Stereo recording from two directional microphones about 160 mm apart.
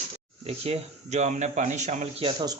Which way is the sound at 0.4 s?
40° right (ahead or behind).